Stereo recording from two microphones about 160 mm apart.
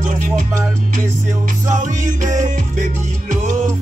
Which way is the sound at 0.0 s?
50° right (ahead or behind).